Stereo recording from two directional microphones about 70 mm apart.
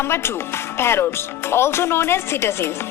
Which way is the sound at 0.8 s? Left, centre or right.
Left.